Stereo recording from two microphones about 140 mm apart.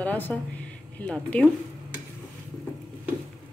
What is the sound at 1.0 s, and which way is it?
Speech, 5° left (ahead or behind).